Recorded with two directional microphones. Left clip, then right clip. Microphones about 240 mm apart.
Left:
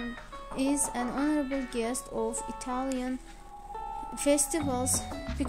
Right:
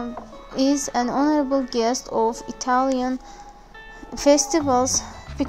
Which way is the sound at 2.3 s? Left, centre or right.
Centre.